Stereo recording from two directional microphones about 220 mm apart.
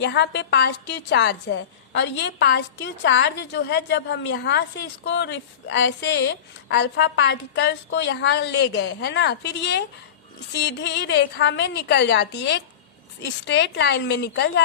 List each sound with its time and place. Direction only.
0.0 s a woman's voice: 50° left (ahead or behind)